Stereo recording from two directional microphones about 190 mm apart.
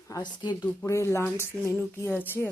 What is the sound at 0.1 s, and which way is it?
Speech, 25° left (ahead or behind).